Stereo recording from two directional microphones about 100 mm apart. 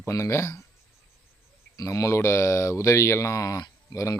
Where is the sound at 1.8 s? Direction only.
30° left (ahead or behind).